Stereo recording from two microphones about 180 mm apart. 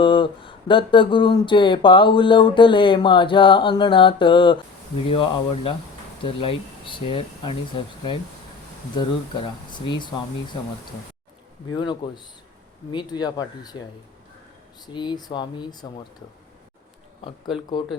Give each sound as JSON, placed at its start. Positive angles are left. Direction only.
{"t": 0.0, "sound": "speech", "side_deg": 25}
{"t": 11.7, "sound": "speech", "side_deg": 25}
{"t": 14.9, "sound": "speech", "side_deg": 25}